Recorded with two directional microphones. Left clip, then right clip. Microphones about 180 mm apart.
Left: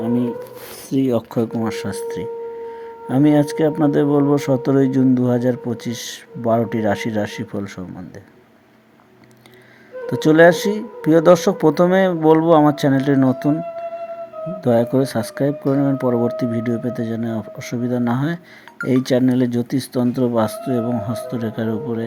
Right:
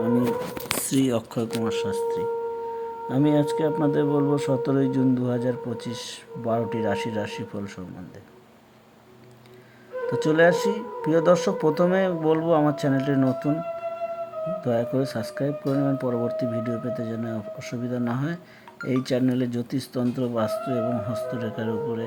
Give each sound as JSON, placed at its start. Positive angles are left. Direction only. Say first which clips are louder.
{"t": 0.0, "sound": "a sound", "louder": "left 2 dB", "side_deg": 20}
{"t": 1.0, "sound": "speech", "louder": "left 6 dB", "side_deg": 25}
{"t": 10.1, "sound": "speech", "louder": "left 7 dB", "side_deg": 20}